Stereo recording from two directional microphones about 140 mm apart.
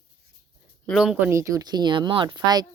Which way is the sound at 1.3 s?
20° right (ahead or behind).